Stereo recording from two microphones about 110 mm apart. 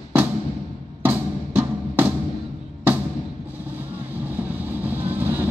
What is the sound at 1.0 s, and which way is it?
Music, 20° right (ahead or behind).